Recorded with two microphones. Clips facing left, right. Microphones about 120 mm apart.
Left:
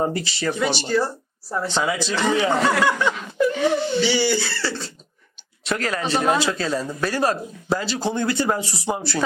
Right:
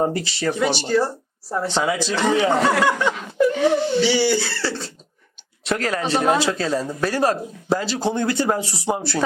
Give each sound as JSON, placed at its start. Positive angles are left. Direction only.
{"t": 0.0, "sound": "speech", "side_deg": -50}
{"t": 0.9, "sound": "speech", "side_deg": -35}
{"t": 1.8, "sound": "speech", "side_deg": -55}
{"t": 4.4, "sound": "speech", "side_deg": -35}
{"t": 5.6, "sound": "speech", "side_deg": -50}
{"t": 8.0, "sound": "speech", "side_deg": -40}
{"t": 8.6, "sound": "speech", "side_deg": -65}
{"t": 8.9, "sound": "speech", "side_deg": -40}